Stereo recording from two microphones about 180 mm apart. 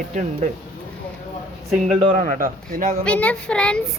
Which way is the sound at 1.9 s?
40° right (ahead or behind).